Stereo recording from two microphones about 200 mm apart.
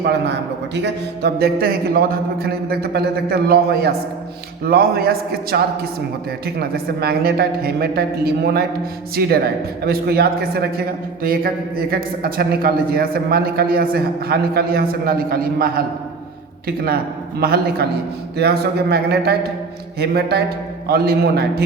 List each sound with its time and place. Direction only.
0.0 s a man's voice: 60° right (ahead or behind)
9.8 s a man's voice: 50° right (ahead or behind)